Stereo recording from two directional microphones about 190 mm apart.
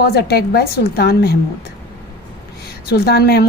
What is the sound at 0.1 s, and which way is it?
A woman's voice, 55° left (ahead or behind).